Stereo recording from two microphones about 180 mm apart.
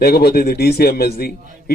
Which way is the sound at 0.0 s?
60° left (ahead or behind).